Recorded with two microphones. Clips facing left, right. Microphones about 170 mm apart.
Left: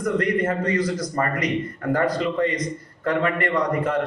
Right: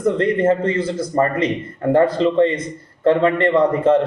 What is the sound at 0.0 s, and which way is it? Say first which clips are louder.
A man's voice: right 5 dB; 25° right (ahead or behind).